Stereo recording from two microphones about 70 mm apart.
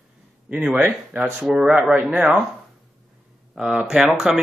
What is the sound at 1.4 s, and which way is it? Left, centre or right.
Speech, centre.